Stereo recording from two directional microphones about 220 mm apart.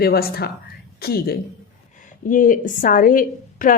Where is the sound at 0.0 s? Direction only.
45° left (ahead or behind).